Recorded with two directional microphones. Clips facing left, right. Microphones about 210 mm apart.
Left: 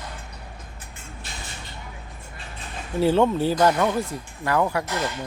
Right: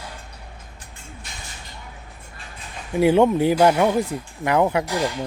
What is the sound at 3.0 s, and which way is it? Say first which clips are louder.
Speech: right 3 dB; 15° right (ahead or behind).